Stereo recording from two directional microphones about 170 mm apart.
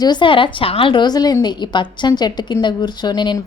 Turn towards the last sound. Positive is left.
turn(degrees=25)  # may be behind; listen again after turning